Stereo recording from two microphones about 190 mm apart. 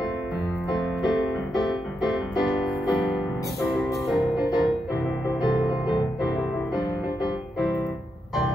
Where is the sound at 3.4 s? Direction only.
15° left (ahead or behind).